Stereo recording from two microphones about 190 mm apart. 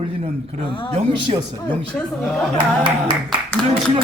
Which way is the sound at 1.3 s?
35° right (ahead or behind).